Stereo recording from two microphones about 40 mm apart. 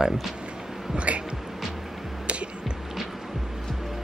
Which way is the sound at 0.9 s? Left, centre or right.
Right.